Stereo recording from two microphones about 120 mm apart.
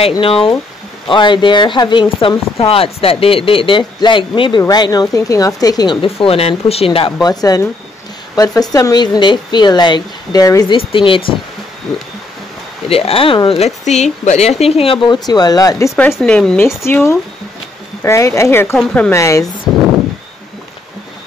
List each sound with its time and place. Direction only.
0.2 s speech: 50° left (ahead or behind)
6.0 s speech: 55° left (ahead or behind)
7.2 s speech: 35° left (ahead or behind)
10.7 s speech: 45° left (ahead or behind)
12.8 s speech: 55° left (ahead or behind)
13.8 s speech: 75° left (ahead or behind); by 15.0 s 55° left (ahead or behind)
15.0 s speech: 35° left (ahead or behind)
16.2 s speech: 10° left (ahead or behind)
16.6 s speech: 20° left (ahead or behind)
19.1 s speech: 25° left (ahead or behind)
19.7 s a sound: centre (ahead or behind)